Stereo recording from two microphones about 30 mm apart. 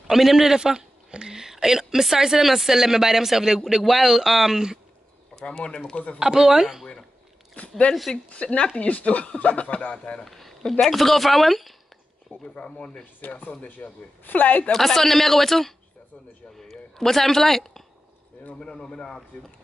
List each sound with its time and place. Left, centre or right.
0.1 s speech: centre
0.7 s a woman's voice: right; by 4.6 s centre
5.3 s a sound: left
6.1 s speech: right
7.6 s a sound: left
8.3 s speech: left
10.2 s speech: centre
12.3 s speech: left
13.2 s speech: left
14.2 s speech: left
14.7 s speech: centre
16.7 s a woman's voice: centre
18.6 s speech: left